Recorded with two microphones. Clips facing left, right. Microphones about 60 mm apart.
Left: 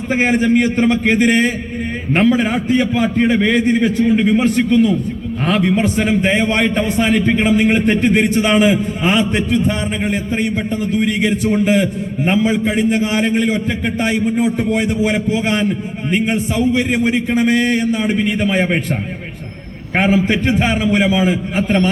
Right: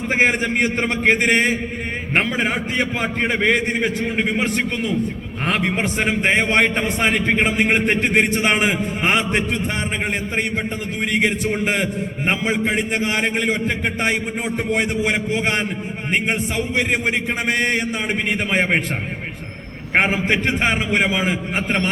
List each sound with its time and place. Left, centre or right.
0.1 s a man's voice: right
14.7 s a man's voice: right
20.0 s a man's voice: right